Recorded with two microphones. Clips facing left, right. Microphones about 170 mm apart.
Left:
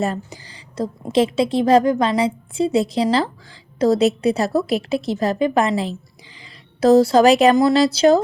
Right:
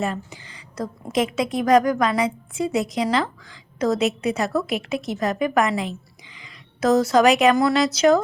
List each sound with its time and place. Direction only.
0.0 s a woman's voice: 35° left (ahead or behind)